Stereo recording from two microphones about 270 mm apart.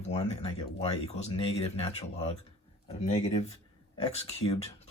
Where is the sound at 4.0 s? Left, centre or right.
Left.